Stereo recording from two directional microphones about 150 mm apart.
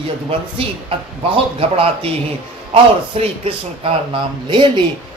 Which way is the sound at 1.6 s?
40° right (ahead or behind).